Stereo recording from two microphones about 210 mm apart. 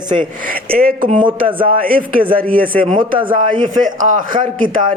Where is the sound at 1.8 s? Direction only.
45° right (ahead or behind).